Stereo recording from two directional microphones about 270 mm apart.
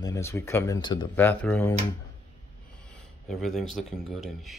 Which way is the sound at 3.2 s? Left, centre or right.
Centre.